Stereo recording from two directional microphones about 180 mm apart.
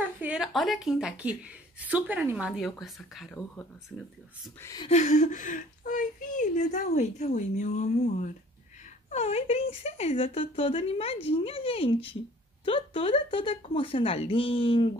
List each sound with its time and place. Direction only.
0.2 s a woman's voice: 5° right (ahead or behind); by 4.8 s 15° left (ahead or behind)
4.8 s a woman's voice: 40° left (ahead or behind)